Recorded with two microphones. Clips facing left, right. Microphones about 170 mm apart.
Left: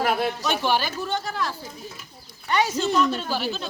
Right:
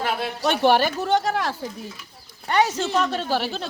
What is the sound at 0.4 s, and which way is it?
A man's voice, 60° right (ahead or behind).